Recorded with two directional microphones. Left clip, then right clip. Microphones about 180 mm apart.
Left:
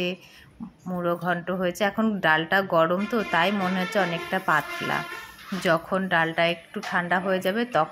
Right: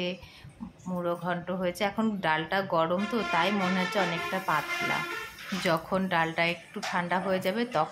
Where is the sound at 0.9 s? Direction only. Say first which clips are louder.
Left 5 dB; 20° left (ahead or behind).